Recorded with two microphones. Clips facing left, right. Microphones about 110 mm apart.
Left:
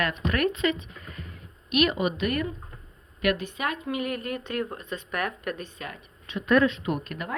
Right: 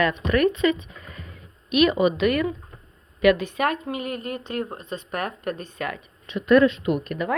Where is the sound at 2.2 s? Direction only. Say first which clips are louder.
Right 6 dB; 90° right.